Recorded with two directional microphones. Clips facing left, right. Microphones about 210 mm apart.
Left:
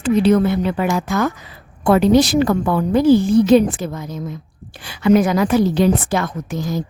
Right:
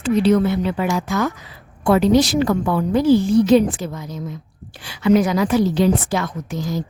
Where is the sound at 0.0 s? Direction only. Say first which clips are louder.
Left 2 dB; 50° left (ahead or behind).